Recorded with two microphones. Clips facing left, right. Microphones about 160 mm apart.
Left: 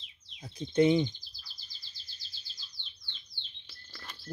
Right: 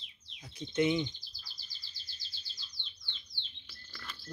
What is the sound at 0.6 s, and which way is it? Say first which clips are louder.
Speech: left 5 dB; 35° left (ahead or behind).